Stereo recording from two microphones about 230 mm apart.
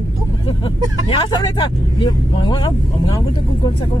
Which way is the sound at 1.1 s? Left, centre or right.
Left.